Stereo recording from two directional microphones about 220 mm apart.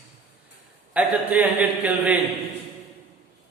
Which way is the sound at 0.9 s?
5° right (ahead or behind).